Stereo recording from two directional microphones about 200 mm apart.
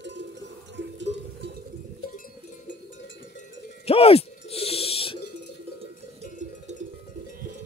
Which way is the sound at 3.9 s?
30° left (ahead or behind).